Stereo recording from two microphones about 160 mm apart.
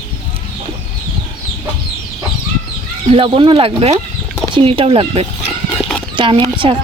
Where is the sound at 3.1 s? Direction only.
35° right (ahead or behind).